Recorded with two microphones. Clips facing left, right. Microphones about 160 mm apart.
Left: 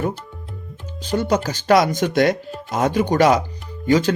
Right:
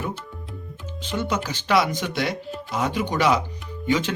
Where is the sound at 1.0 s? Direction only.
40° left (ahead or behind).